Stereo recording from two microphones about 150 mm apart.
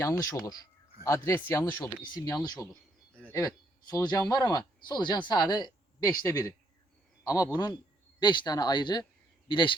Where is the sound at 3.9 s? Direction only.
30° left (ahead or behind).